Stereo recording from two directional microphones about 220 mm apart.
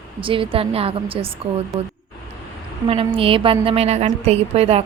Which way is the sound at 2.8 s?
25° right (ahead or behind).